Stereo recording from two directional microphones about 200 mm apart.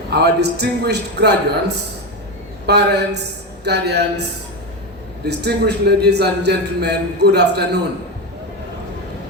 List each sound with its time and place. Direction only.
0.1 s a man's voice: 55° right (ahead or behind)
5.2 s a man's voice: 55° right (ahead or behind)